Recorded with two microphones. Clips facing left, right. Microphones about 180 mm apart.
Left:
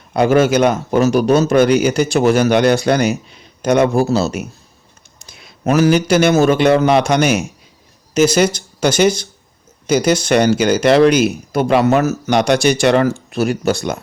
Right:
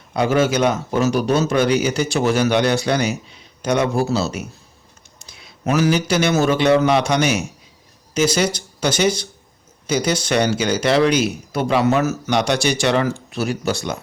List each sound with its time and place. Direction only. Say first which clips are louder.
0.1 s a man's voice: left 5 dB; 55° left (ahead or behind)
1.0 s speech: left 5 dB; 45° left (ahead or behind); by 4.4 s 60° left (ahead or behind)
5.2 s a man's voice: left 4 dB; 45° left (ahead or behind)